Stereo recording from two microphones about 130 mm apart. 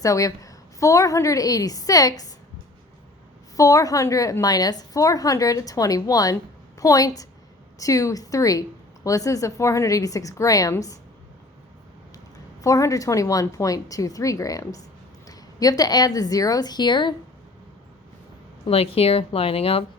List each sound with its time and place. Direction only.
0.0 s a woman's voice: 25° left (ahead or behind)
3.5 s a woman's voice: 25° left (ahead or behind)
12.6 s a woman's voice: 25° left (ahead or behind)
18.7 s speech: 50° left (ahead or behind)